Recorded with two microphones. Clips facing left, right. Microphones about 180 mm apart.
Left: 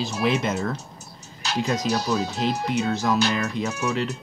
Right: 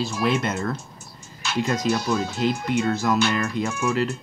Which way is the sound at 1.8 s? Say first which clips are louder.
Right 1 dB; 40° left (ahead or behind).